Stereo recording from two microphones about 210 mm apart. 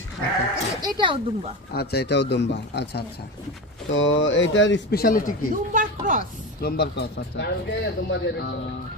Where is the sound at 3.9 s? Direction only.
65° left (ahead or behind); by 5.3 s 45° left (ahead or behind).